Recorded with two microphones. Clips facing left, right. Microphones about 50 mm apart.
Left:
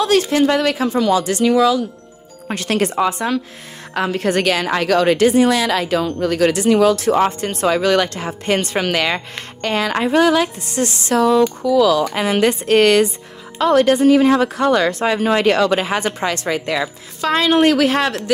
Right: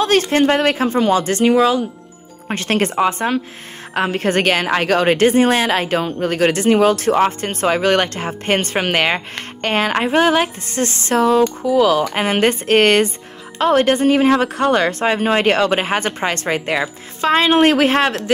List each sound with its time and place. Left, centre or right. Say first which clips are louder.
0.0 s speech: even; right